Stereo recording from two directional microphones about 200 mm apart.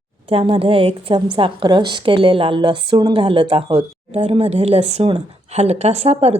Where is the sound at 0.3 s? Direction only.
30° right (ahead or behind).